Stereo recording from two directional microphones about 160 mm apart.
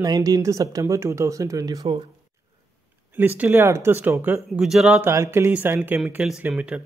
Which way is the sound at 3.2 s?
10° right (ahead or behind).